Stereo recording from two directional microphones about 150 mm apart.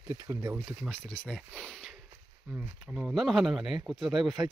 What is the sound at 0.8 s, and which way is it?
Speech, 10° left (ahead or behind).